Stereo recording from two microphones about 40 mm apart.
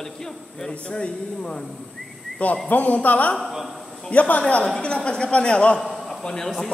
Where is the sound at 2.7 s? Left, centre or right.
Left.